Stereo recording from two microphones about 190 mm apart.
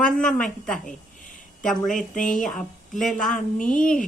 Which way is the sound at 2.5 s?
Centre (ahead or behind).